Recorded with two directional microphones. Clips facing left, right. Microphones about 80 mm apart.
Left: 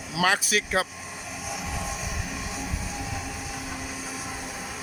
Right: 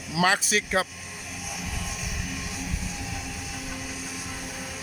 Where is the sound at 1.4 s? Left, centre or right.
Left.